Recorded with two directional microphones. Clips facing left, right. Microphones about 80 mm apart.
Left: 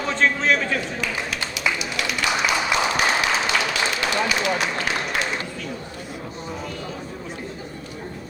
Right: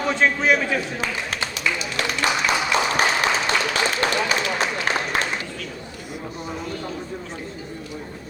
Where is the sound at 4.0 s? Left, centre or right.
Right.